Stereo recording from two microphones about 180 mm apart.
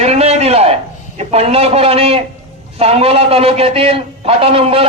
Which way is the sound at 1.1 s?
35° right (ahead or behind).